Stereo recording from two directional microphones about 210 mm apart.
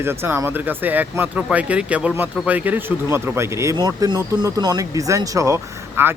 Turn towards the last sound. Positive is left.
turn(degrees=-10)  # may be behind; listen again after turning